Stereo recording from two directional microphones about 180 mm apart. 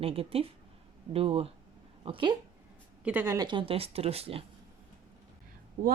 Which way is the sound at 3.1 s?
15° right (ahead or behind).